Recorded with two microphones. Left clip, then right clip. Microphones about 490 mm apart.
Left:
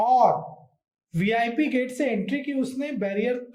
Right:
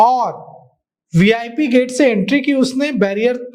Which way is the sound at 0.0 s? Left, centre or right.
Right.